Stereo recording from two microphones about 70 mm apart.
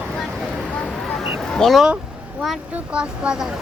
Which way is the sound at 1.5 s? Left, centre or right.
Centre.